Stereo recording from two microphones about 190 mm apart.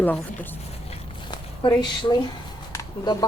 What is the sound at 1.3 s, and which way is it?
A woman's voice, 25° left (ahead or behind).